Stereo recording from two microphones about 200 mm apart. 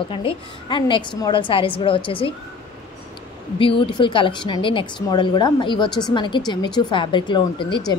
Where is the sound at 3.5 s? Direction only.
25° left (ahead or behind).